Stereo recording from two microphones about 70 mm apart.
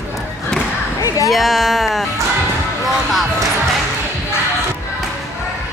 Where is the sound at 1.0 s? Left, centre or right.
Left.